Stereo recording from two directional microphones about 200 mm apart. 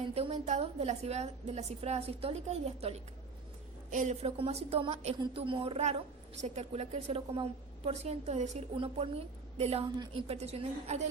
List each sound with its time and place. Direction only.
0.1 s a woman's voice: 30° right (ahead or behind)
3.9 s a woman's voice: 35° right (ahead or behind)